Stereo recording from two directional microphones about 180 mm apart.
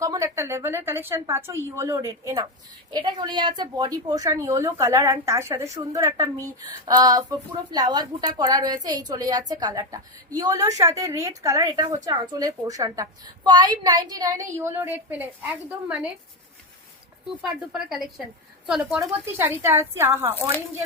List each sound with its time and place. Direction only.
0.0 s a woman's voice: 20° right (ahead or behind)
17.2 s a woman's voice: centre (ahead or behind)